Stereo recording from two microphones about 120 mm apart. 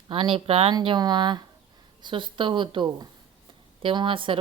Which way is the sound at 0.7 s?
40° right (ahead or behind).